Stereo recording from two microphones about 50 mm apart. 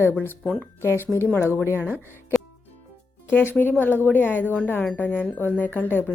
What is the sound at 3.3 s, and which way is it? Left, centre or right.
Speech, left.